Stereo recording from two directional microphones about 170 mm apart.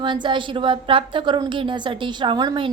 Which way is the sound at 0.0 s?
30° right (ahead or behind).